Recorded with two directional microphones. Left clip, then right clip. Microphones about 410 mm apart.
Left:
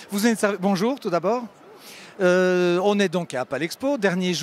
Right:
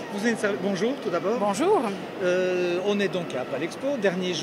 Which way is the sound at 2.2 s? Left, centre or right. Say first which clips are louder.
Left 5 dB; left.